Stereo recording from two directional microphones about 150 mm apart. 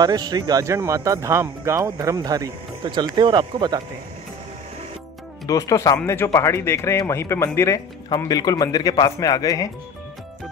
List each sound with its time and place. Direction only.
0.0 s speech: 25° right (ahead or behind)
5.5 s speech: 20° left (ahead or behind)